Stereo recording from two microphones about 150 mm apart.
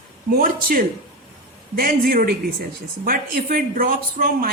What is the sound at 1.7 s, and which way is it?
Speech, 80° right.